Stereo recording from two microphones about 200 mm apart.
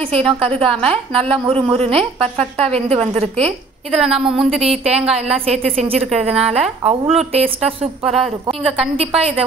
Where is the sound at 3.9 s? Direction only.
5° right (ahead or behind).